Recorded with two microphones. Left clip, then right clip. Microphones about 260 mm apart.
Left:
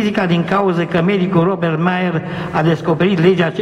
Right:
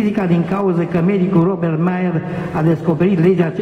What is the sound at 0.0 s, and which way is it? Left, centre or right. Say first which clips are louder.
A man's voice: left 2 dB; centre.